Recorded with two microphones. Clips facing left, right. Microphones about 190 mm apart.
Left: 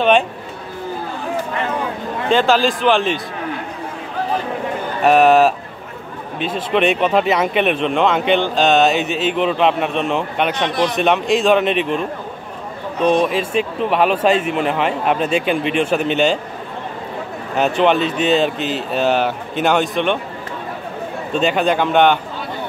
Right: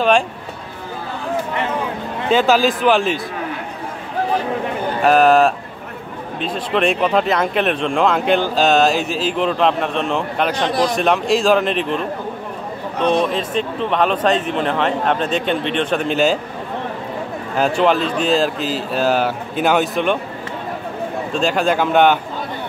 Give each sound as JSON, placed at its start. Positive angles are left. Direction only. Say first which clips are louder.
{"t": 2.2, "sound": "speech", "louder": "even", "side_deg": -5}
{"t": 5.0, "sound": "speech", "louder": "left 1 dB", "side_deg": 0}
{"t": 10.5, "sound": "a man's voice", "louder": "right 2 dB", "side_deg": -35}
{"t": 11.0, "sound": "speech", "louder": "left 3 dB", "side_deg": 0}
{"t": 13.0, "sound": "speech", "louder": "left 2 dB", "side_deg": 5}
{"t": 17.6, "sound": "speech", "louder": "left 1 dB", "side_deg": 0}
{"t": 21.3, "sound": "speech", "louder": "left 2 dB", "side_deg": 0}